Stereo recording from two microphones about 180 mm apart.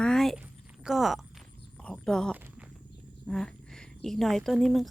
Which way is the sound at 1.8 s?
5° left (ahead or behind).